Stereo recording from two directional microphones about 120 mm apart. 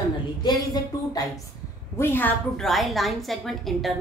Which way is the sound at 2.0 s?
15° left (ahead or behind).